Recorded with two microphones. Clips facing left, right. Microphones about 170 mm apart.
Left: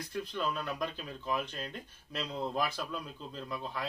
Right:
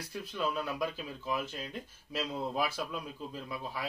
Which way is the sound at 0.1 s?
5° right (ahead or behind).